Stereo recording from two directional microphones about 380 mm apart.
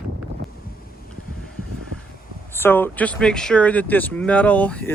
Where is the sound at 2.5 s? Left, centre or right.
Centre.